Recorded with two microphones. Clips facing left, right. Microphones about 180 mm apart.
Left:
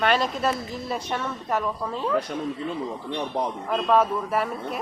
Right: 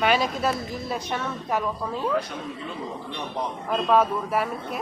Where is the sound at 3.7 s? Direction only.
Centre (ahead or behind).